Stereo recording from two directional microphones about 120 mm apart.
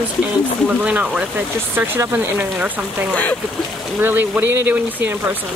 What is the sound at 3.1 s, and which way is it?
Speech, 10° left (ahead or behind).